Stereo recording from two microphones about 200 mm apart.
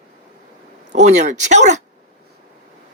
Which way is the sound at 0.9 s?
35° right (ahead or behind).